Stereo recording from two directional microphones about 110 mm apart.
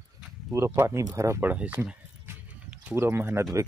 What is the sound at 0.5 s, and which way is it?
Speech, 25° right (ahead or behind).